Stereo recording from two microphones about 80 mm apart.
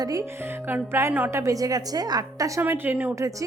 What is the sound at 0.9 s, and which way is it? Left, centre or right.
Speech, right.